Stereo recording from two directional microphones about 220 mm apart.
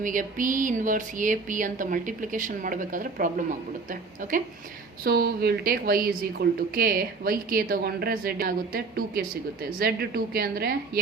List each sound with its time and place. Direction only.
0.0 s a woman's voice: 35° right (ahead or behind)